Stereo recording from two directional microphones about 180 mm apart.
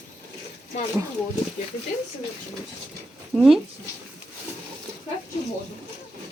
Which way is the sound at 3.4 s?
Centre (ahead or behind).